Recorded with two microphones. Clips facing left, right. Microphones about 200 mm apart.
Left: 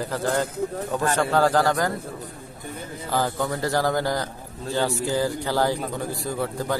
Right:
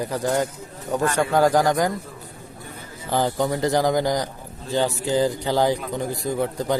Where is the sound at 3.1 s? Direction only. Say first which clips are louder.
Right 3 dB; 20° right (ahead or behind).